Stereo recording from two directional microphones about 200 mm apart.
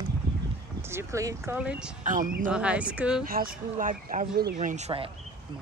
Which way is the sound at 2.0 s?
45° right (ahead or behind).